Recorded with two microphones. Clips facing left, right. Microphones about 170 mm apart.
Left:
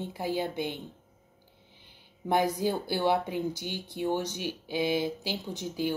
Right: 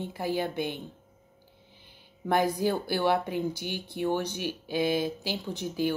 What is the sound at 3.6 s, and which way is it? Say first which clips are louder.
Speech: right 2 dB; 15° right (ahead or behind).